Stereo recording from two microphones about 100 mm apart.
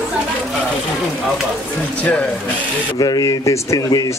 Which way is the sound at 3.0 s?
40° left (ahead or behind).